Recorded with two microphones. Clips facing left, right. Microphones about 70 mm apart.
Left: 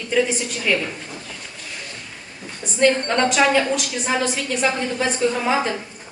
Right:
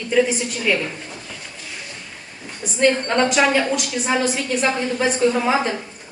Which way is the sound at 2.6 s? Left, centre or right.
Centre.